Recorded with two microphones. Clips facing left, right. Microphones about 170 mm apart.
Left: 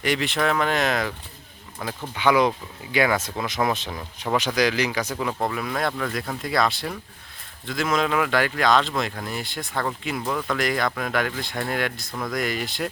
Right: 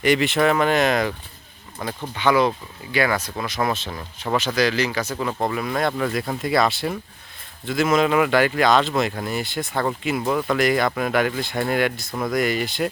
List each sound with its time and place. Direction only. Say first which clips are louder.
0.0 s speech: right 5 dB; centre (ahead or behind); by 5.1 s 15° left (ahead or behind)
5.1 s speech: right 2 dB; 5° right (ahead or behind)